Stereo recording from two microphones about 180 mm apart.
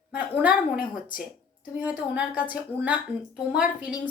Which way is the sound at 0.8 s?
50° left (ahead or behind).